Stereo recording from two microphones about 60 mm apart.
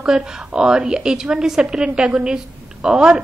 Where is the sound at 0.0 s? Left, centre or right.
Centre.